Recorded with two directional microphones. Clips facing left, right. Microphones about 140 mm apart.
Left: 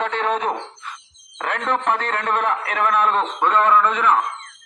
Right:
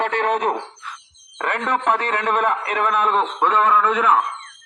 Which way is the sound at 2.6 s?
5° right (ahead or behind).